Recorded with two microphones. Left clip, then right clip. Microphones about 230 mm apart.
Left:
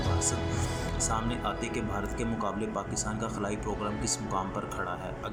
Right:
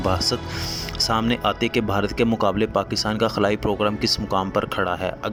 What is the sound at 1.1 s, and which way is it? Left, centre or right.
Speech, right.